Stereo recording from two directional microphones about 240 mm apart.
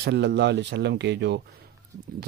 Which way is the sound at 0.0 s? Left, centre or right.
Right.